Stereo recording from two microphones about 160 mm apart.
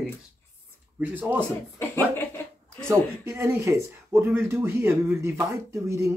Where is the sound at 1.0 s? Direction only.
10° right (ahead or behind).